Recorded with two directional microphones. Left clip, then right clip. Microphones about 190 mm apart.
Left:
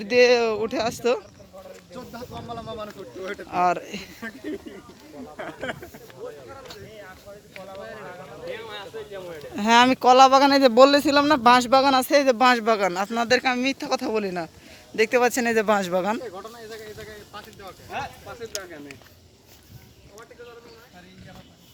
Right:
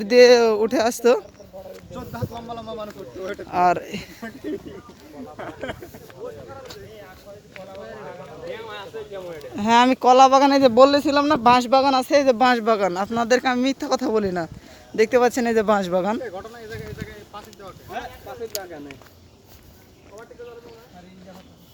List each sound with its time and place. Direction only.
0.0 s speech: 30° right (ahead or behind)
1.9 s speech: 15° left (ahead or behind)
2.5 s speech: 15° right (ahead or behind)
3.2 s speech: 25° left (ahead or behind)
3.5 s speech: 30° right (ahead or behind)
5.4 s speech: 5° right (ahead or behind)
7.8 s speech: 15° left (ahead or behind); by 16.2 s 5° right (ahead or behind)
18.5 s speech: 20° right (ahead or behind)